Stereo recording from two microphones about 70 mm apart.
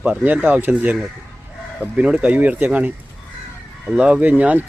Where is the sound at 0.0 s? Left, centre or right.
Right.